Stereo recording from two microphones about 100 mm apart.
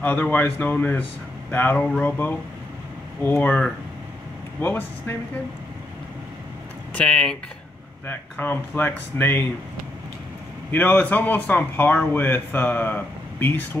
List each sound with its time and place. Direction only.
0.0 s speech: 15° left (ahead or behind)
4.6 s speech: 20° left (ahead or behind)
6.9 s speech: 10° left (ahead or behind)
10.7 s speech: 20° left (ahead or behind)